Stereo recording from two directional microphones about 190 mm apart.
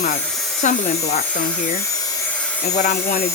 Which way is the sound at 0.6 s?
40° left (ahead or behind).